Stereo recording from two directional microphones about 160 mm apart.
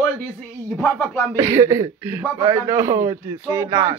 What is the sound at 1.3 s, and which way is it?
Speech, 20° right (ahead or behind).